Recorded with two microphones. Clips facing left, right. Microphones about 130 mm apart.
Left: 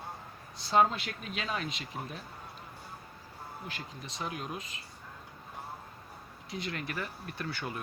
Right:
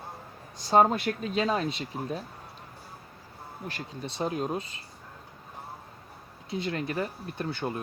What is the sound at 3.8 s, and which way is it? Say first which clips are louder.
Speech: right 11 dB; 35° right (ahead or behind).